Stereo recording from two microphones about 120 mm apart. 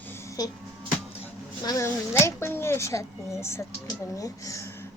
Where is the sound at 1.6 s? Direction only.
25° left (ahead or behind).